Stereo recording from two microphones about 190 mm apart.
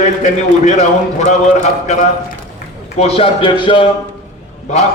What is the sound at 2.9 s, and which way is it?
Speech, 30° left (ahead or behind).